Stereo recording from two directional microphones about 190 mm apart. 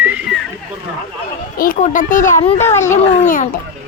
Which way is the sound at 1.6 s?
45° left (ahead or behind).